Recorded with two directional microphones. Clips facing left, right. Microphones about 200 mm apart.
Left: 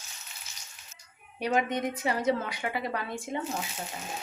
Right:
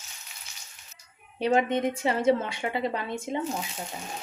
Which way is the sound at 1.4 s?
25° right (ahead or behind).